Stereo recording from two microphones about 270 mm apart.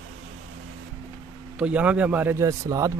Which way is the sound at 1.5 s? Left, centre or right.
Centre.